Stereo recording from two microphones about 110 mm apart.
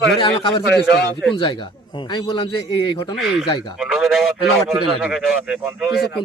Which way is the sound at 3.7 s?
5° right (ahead or behind).